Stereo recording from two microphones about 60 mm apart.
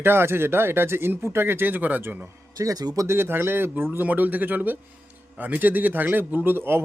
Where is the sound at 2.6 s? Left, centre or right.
Right.